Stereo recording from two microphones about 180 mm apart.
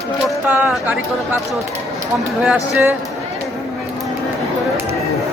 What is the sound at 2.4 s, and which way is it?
Speech, 10° right (ahead or behind).